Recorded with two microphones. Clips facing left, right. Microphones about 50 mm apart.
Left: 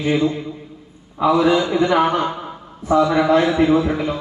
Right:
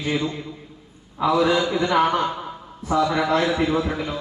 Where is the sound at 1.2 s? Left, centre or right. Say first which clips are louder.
Left 4 dB; centre.